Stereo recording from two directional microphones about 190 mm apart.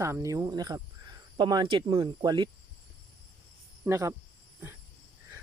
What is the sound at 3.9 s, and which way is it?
Speech, 15° right (ahead or behind).